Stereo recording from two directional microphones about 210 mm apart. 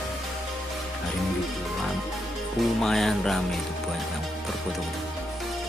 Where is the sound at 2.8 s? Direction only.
Centre (ahead or behind).